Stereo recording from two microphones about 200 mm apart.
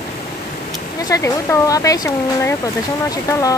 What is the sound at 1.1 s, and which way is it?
Speech, 15° left (ahead or behind).